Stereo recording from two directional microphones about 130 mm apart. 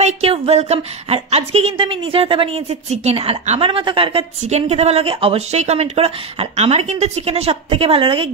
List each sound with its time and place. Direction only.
0.0 s a woman's voice: 50° right (ahead or behind)